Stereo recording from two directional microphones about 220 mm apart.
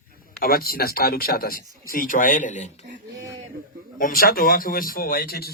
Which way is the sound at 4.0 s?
40° left (ahead or behind).